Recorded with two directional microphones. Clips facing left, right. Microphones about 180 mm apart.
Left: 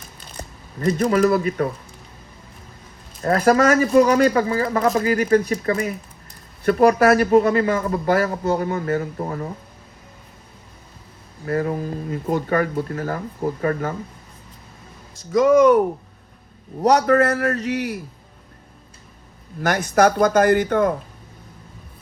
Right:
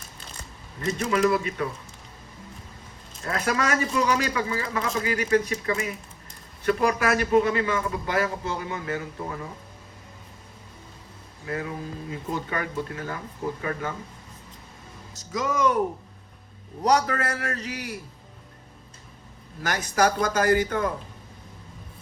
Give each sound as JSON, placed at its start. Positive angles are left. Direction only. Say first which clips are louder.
{"t": 0.3, "sound": "speech", "louder": "left 9 dB", "side_deg": 50}
{"t": 3.2, "sound": "speech", "louder": "left 10 dB", "side_deg": 45}
{"t": 11.4, "sound": "speech", "louder": "left 9 dB", "side_deg": 50}
{"t": 15.3, "sound": "speech", "louder": "left 11 dB", "side_deg": 55}
{"t": 16.8, "sound": "speech", "louder": "left 7 dB", "side_deg": 55}
{"t": 20.0, "sound": "speech", "louder": "left 7 dB", "side_deg": 55}